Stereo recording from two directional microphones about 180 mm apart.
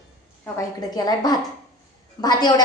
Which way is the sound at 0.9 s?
20° left (ahead or behind).